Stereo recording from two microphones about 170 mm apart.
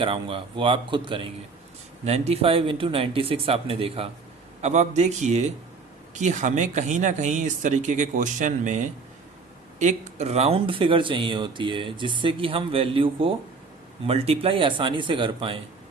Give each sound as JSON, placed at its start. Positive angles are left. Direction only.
{"t": 0.0, "sound": "speech", "side_deg": -30}